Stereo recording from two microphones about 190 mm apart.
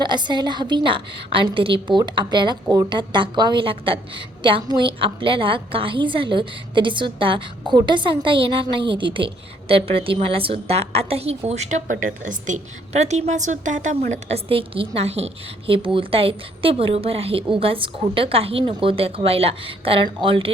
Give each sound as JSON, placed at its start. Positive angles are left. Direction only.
{"t": 0.0, "sound": "a woman's voice", "side_deg": -25}